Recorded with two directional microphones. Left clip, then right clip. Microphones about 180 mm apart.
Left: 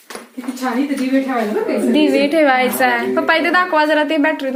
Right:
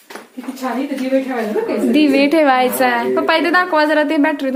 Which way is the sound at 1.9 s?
30° right (ahead or behind).